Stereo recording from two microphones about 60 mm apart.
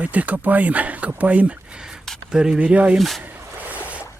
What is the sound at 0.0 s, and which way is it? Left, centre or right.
Speech, right.